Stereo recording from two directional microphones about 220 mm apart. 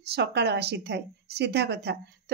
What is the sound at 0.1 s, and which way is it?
A woman's voice, 50° right (ahead or behind).